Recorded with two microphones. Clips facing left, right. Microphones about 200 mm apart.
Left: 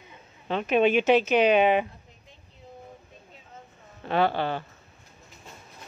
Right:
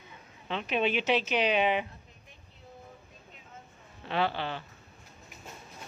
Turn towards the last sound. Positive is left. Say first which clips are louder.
# left 6 dB
turn(degrees=50)  # may be behind; listen again after turning